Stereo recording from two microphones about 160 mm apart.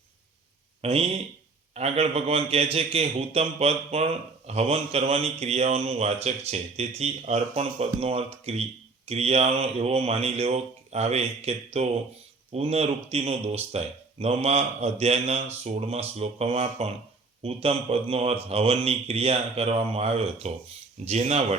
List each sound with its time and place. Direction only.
0.8 s a man's voice: 40° right (ahead or behind)